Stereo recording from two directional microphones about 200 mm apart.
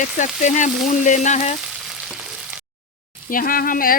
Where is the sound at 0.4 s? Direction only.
40° left (ahead or behind).